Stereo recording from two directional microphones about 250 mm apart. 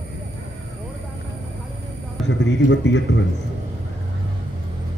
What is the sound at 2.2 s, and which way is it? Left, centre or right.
A man's voice, left.